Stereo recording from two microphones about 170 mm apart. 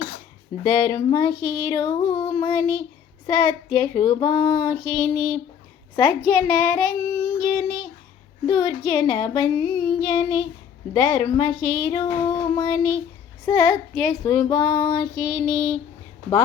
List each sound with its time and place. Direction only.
0.6 s child singing: 25° left (ahead or behind)
6.0 s a woman's voice: 15° left (ahead or behind)
7.4 s child singing: 25° left (ahead or behind)